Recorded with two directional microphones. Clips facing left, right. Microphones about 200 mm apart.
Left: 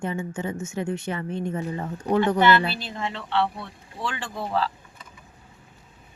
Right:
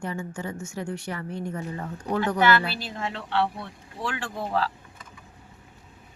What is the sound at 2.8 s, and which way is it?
Speech, 5° right (ahead or behind).